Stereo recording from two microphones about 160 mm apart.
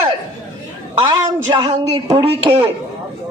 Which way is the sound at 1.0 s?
25° right (ahead or behind).